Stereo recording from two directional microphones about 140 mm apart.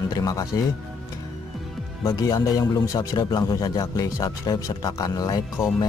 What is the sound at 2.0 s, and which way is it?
Speech, 25° left (ahead or behind).